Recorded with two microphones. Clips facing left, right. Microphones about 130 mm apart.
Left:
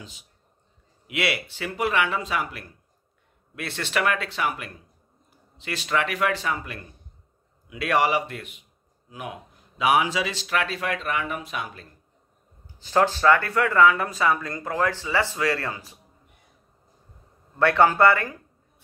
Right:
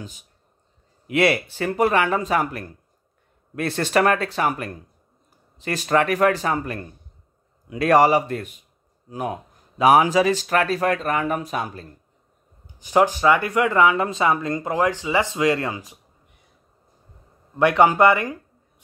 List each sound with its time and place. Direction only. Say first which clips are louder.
1.0 s speech: right 8 dB; 45° right (ahead or behind)
12.7 s speech: right 3 dB; 15° right (ahead or behind)
17.6 s speech: right 3 dB; 15° right (ahead or behind)